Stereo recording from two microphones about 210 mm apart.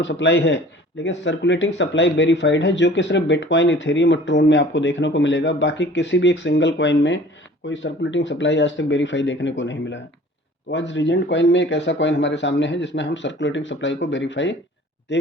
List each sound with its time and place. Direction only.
0.0 s speech: 55° left (ahead or behind)